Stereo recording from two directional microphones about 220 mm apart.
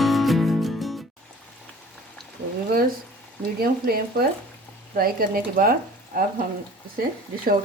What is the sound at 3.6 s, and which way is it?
Speech, 45° right (ahead or behind).